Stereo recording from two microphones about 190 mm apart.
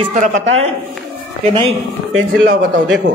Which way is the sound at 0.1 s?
40° right (ahead or behind).